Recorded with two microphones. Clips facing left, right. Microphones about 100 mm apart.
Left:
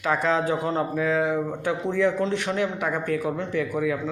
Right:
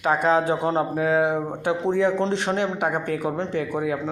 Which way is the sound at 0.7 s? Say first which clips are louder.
Right 2 dB; 35° right (ahead or behind).